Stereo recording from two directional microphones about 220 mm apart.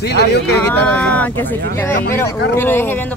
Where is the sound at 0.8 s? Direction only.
5° left (ahead or behind).